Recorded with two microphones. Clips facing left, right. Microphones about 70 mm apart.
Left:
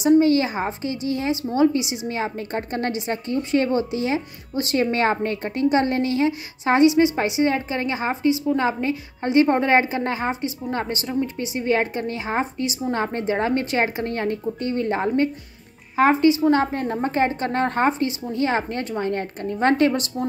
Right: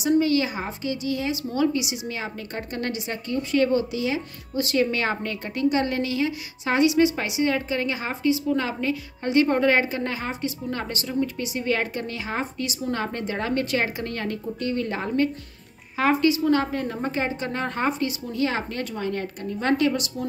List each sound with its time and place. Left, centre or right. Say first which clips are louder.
0.0 s a woman's voice: left 5 dB; left